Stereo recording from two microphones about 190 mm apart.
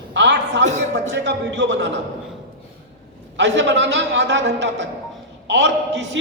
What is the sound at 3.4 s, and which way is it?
A man's voice, 65° right (ahead or behind).